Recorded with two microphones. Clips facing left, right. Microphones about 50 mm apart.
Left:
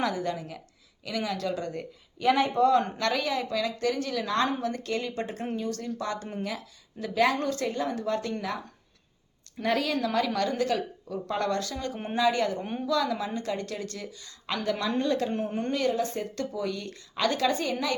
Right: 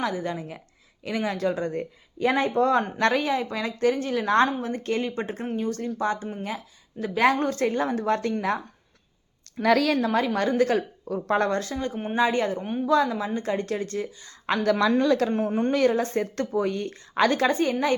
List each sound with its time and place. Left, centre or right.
0.0 s a woman's voice: centre; by 8.6 s right
9.6 s a woman's voice: right
10.0 s a woman's voice: right
10.6 s a woman's voice: right
11.4 s a woman's voice: right
11.9 s speech: centre
12.1 s a woman's voice: right
14.6 s speech: right
15.5 s a woman's voice: right